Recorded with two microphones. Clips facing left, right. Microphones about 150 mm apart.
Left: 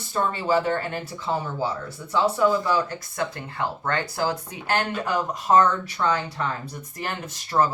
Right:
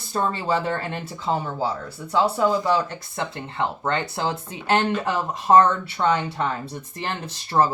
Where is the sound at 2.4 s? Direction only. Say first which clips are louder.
Right 1 dB; 25° right (ahead or behind).